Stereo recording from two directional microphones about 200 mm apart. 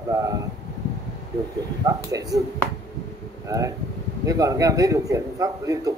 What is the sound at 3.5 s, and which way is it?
A man's voice, 15° right (ahead or behind).